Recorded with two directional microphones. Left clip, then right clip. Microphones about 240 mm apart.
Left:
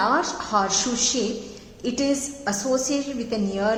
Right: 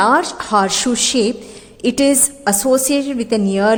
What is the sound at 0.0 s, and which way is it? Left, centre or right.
A woman's voice, right.